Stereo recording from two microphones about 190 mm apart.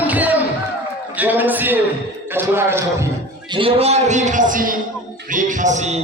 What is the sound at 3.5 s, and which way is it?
A man's voice, 30° right (ahead or behind).